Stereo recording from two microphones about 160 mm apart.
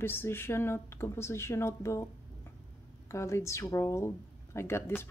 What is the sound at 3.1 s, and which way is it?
A woman's voice, 20° left (ahead or behind).